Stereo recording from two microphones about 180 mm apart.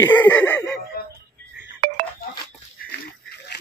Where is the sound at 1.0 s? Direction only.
60° left (ahead or behind).